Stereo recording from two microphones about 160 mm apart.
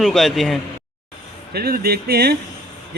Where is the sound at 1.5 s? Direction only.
75° right (ahead or behind).